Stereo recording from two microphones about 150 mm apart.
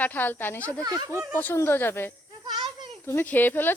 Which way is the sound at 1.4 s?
15° left (ahead or behind).